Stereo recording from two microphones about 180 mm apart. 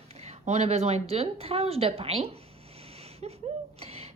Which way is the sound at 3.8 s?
35° right (ahead or behind).